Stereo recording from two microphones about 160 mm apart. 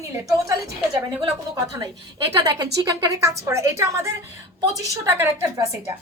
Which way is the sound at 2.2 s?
25° right (ahead or behind).